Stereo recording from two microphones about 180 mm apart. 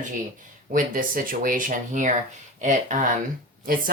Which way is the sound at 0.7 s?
50° right (ahead or behind).